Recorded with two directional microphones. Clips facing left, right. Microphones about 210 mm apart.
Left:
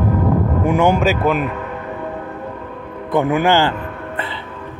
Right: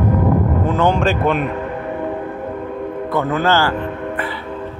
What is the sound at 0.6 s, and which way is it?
Speech, 10° left (ahead or behind).